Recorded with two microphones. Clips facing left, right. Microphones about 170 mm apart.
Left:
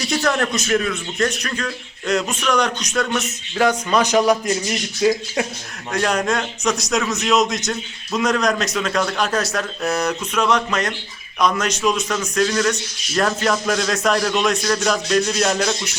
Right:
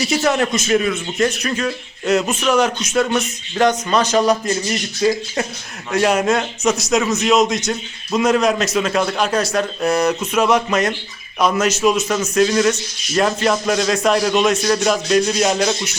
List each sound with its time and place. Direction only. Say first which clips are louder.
0.3 s speech: right 2 dB; 5° right (ahead or behind)
3.9 s speech: right 1 dB; 15° left (ahead or behind)
5.9 s speech: right 4 dB; 5° right (ahead or behind)